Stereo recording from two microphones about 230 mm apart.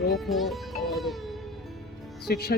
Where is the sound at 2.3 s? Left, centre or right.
Left.